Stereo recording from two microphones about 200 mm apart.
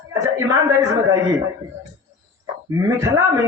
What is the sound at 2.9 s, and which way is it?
Speech, 15° right (ahead or behind).